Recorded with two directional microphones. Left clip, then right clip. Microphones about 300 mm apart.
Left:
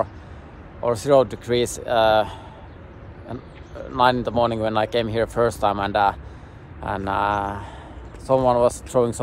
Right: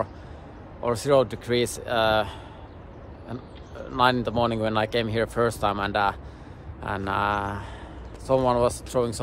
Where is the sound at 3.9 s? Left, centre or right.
Centre.